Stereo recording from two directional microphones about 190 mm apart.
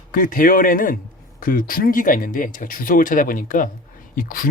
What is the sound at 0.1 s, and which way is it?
Speech, 45° left (ahead or behind).